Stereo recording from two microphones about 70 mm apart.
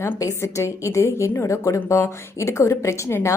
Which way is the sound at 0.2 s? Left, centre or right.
Left.